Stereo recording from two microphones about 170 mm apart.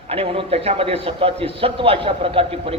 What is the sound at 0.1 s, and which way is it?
A man's voice, 35° right (ahead or behind).